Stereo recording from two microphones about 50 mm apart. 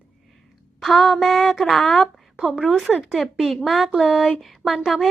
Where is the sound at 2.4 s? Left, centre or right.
Centre.